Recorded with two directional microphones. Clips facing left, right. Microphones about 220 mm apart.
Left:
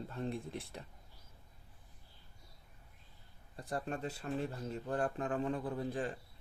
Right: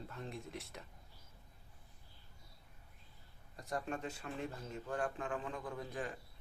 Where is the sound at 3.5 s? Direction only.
30° left (ahead or behind).